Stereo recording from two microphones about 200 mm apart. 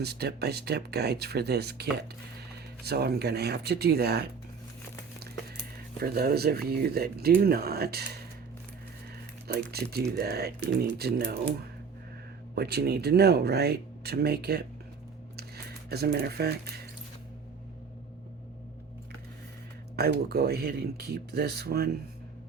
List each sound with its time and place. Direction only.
0.0 s speech: 55° right (ahead or behind)
6.0 s speech: 50° right (ahead or behind)
9.7 s speech: 50° right (ahead or behind)
12.5 s speech: 55° right (ahead or behind)
20.0 s speech: 50° right (ahead or behind)